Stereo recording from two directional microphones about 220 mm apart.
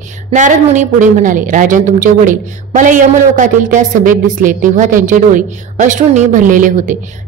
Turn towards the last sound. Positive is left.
turn(degrees=-35)  # may be behind; listen again after turning